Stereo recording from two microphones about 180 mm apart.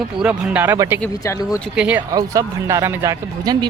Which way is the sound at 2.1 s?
20° right (ahead or behind).